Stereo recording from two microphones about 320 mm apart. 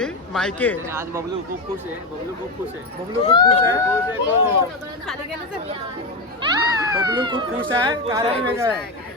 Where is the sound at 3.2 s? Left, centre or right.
Centre.